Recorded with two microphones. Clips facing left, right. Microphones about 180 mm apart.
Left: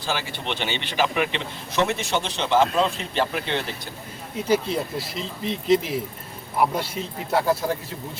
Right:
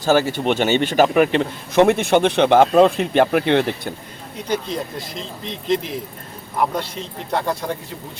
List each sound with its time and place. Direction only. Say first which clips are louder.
0.0 s a man's voice: right 12 dB; 45° right (ahead or behind)
4.4 s speech: left 1 dB; 5° left (ahead or behind)